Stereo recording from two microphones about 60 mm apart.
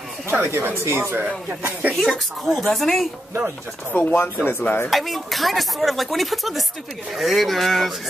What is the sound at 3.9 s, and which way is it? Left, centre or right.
Speech, left.